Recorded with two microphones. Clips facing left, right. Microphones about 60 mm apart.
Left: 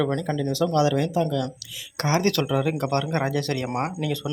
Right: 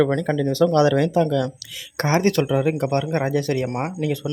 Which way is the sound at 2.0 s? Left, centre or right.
Right.